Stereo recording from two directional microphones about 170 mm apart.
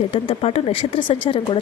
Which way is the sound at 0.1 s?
35° left (ahead or behind).